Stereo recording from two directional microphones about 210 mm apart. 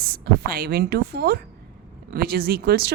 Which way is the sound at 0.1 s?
45° right (ahead or behind).